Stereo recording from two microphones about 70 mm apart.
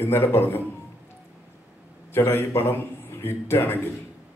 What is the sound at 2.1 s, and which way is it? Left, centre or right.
A man's voice, left.